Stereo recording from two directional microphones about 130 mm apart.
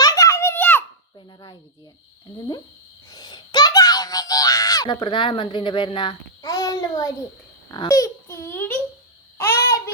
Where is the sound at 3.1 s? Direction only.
30° left (ahead or behind).